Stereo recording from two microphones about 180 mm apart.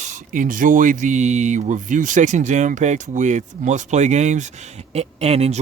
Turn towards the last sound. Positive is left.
turn(degrees=-35)  # may be behind; listen again after turning